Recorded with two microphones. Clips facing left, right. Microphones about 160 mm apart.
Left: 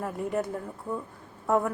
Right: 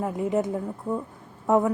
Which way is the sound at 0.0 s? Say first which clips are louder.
Right 5 dB; 20° right (ahead or behind).